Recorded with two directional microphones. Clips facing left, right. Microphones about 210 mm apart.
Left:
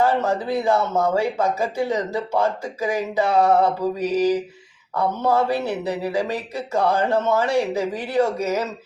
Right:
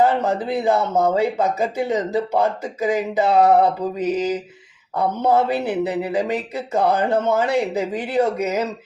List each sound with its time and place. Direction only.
0.0 s speech: 20° right (ahead or behind)